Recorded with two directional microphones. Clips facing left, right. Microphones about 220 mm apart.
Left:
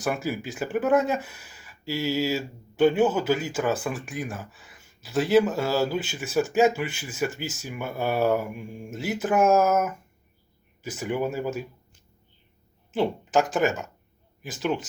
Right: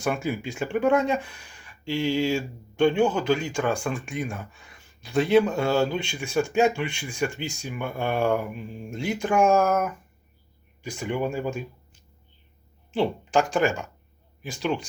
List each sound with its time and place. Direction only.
0.0 s speech: 5° left (ahead or behind)
13.0 s speech: 5° left (ahead or behind)